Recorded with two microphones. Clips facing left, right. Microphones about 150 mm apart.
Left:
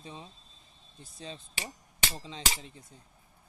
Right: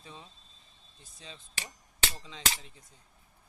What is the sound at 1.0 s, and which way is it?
Speech, 35° left (ahead or behind).